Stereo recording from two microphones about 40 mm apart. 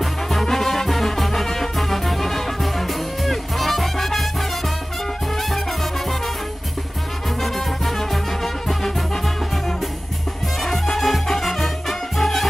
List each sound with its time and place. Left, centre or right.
0.0 s music: centre
7.4 s music: centre
10.6 s music: centre